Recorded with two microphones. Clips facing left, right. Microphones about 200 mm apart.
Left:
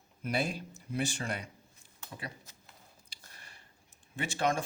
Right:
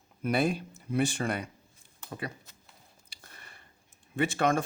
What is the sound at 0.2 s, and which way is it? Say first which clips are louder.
Speech: right 6 dB; 55° right (ahead or behind).